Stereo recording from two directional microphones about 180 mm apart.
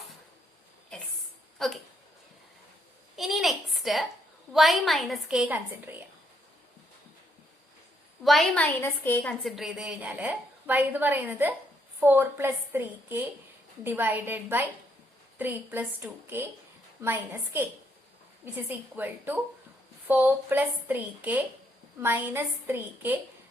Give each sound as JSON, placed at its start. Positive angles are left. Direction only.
{"t": 1.5, "sound": "speech", "side_deg": 0}
{"t": 3.2, "sound": "a sound", "side_deg": 0}
{"t": 4.5, "sound": "a woman's voice", "side_deg": 0}
{"t": 8.2, "sound": "a woman's voice", "side_deg": 0}
{"t": 9.4, "sound": "a woman's voice", "side_deg": 0}